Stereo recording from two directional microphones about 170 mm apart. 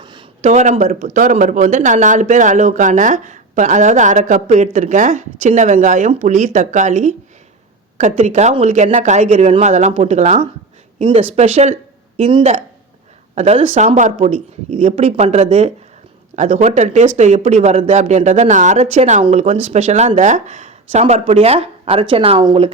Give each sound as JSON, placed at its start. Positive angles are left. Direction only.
{"t": 0.0, "sound": "a sound", "side_deg": -25}
{"t": 0.4, "sound": "speech", "side_deg": -45}
{"t": 11.0, "sound": "speech", "side_deg": -35}